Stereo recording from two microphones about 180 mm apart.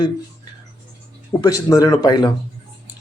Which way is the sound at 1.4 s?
20° left (ahead or behind).